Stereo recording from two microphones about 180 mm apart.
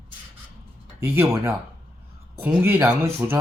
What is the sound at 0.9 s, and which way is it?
Speech, 15° right (ahead or behind).